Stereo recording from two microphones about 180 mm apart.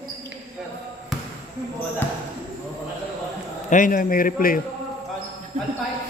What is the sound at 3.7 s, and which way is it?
Speech, 50° left (ahead or behind).